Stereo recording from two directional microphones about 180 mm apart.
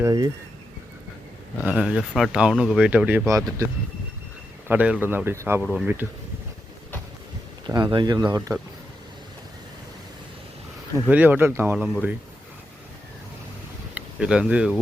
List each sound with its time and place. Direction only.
0.0 s speech: 20° right (ahead or behind)
1.6 s speech: 5° right (ahead or behind)
4.7 s speech: 10° right (ahead or behind)
7.7 s speech: 25° right (ahead or behind)
8.4 s speech: 10° right (ahead or behind)
11.1 s speech: 10° right (ahead or behind)
13.9 s speech: 5° right (ahead or behind)